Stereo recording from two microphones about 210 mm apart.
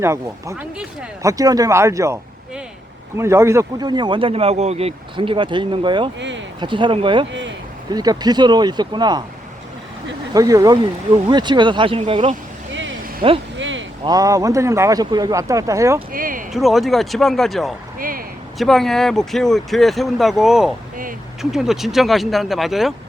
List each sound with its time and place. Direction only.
0.0 s speech: 10° right (ahead or behind)
3.2 s a man's voice: 10° right (ahead or behind)
6.1 s speech: 60° right (ahead or behind)
6.6 s a man's voice: 25° right (ahead or behind)
10.3 s a man's voice: 15° right (ahead or behind)
13.6 s a sound: 60° right (ahead or behind)
14.0 s speech: 20° right (ahead or behind)
16.1 s a sound: 40° right (ahead or behind)
16.5 s speech: centre (ahead or behind)